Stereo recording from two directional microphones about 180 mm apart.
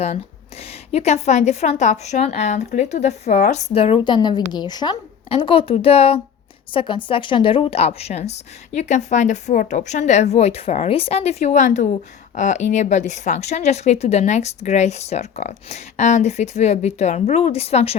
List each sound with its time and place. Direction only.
0.6 s a woman's voice: 35° left (ahead or behind)